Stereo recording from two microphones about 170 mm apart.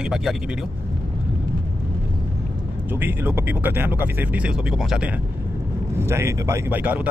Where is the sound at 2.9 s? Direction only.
15° right (ahead or behind).